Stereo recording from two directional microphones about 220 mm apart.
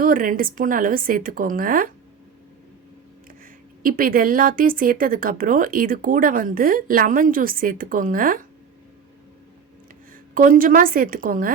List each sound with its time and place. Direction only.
0.0 s speech: 40° right (ahead or behind)
3.8 s speech: 40° right (ahead or behind)
10.3 s speech: 40° right (ahead or behind)